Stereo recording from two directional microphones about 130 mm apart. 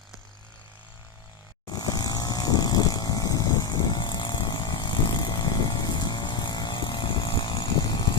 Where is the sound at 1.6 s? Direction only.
30° left (ahead or behind).